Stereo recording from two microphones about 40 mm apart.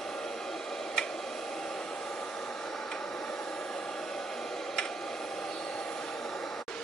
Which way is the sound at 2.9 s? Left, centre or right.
Centre.